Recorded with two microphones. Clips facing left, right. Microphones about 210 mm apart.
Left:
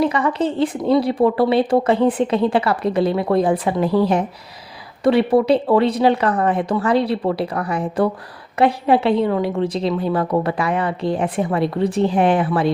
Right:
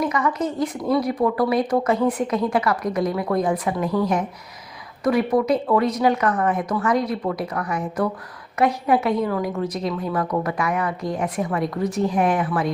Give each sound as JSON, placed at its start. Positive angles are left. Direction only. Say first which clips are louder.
{"t": 0.0, "sound": "speech", "louder": "left 4 dB", "side_deg": 30}